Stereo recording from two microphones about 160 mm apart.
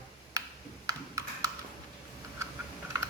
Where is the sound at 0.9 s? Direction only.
20° right (ahead or behind).